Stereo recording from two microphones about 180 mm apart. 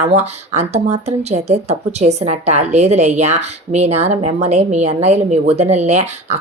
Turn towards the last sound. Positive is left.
turn(degrees=-35)  # may be behind; listen again after turning